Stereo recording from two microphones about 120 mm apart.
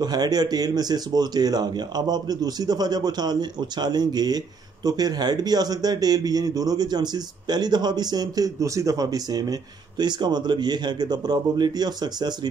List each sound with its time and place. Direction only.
0.0 s speech: 35° right (ahead or behind)